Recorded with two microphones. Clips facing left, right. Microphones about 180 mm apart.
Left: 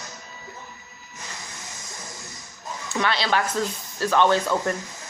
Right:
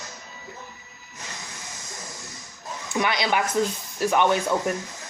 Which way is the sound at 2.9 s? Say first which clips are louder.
Even; 15° right (ahead or behind).